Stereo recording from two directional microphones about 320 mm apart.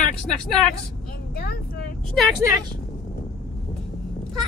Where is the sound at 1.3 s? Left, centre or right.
Left.